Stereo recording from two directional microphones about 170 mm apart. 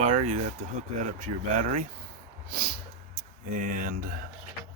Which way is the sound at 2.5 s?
65° right (ahead or behind).